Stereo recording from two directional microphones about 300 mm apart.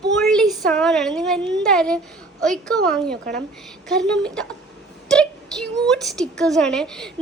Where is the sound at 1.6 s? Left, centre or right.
Centre.